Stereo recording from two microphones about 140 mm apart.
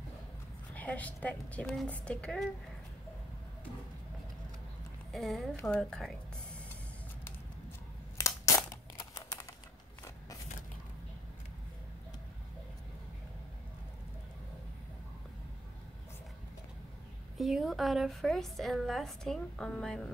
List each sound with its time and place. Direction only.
0.7 s a woman's voice: 10° left (ahead or behind)
5.1 s a woman's voice: centre (ahead or behind)
8.9 s typing: 25° left (ahead or behind)
17.4 s a woman's voice: centre (ahead or behind)